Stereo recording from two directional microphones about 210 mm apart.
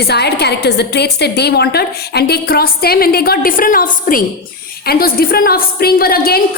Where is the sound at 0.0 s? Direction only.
50° left (ahead or behind).